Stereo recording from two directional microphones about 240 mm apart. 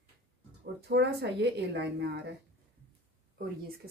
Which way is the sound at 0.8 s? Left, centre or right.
Right.